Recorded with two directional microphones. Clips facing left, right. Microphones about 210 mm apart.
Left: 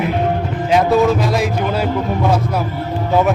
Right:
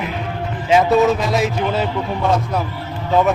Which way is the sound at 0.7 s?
Centre (ahead or behind).